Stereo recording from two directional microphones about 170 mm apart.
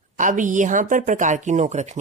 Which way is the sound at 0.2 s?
50° right (ahead or behind).